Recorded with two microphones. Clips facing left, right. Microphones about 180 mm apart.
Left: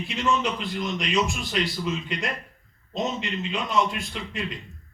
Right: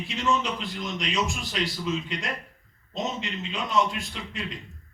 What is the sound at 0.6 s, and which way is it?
A man's voice, 55° left (ahead or behind).